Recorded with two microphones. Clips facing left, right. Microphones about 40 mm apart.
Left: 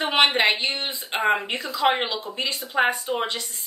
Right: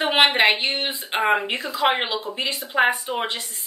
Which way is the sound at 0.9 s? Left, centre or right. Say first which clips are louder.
Right 1 dB; centre.